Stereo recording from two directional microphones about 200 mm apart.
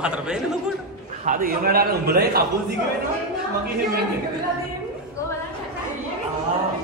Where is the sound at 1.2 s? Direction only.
45° right (ahead or behind).